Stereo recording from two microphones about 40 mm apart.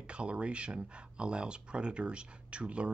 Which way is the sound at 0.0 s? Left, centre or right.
Right.